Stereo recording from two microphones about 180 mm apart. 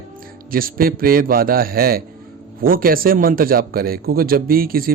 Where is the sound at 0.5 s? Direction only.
55° right (ahead or behind).